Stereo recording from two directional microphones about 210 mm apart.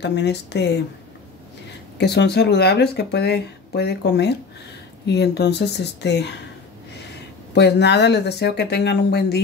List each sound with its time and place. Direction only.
0.0 s speech: 55° left (ahead or behind)
2.0 s speech: 50° left (ahead or behind)
7.5 s speech: 55° left (ahead or behind)